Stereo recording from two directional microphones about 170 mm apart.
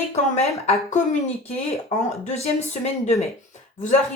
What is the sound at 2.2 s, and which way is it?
A woman's voice, 40° left (ahead or behind).